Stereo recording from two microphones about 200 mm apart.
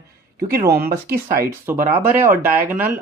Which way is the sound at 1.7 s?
10° right (ahead or behind).